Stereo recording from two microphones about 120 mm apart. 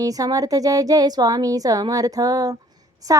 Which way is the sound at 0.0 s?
30° right (ahead or behind).